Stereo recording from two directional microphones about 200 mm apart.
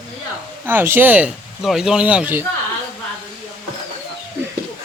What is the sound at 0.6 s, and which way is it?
Speech, 10° right (ahead or behind).